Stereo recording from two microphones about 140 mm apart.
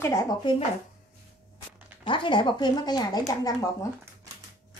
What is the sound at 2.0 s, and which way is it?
Speech, 35° left (ahead or behind).